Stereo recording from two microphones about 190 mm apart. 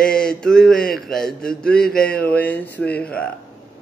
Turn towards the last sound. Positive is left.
turn(degrees=5)  # may be behind; listen again after turning